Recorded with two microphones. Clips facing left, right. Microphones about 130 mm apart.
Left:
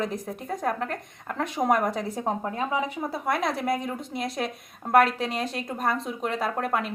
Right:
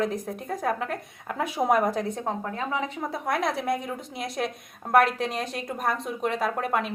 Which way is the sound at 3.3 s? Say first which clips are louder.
Even; centre (ahead or behind).